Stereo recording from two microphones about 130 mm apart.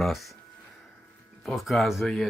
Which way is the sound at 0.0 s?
Centre (ahead or behind).